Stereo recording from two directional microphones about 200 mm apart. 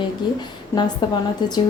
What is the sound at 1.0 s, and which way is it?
Speech, 20° left (ahead or behind).